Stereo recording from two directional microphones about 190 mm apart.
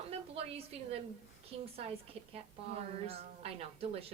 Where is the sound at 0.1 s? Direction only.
30° right (ahead or behind).